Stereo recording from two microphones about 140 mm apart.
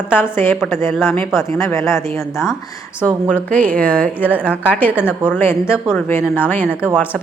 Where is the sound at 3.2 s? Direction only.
10° left (ahead or behind).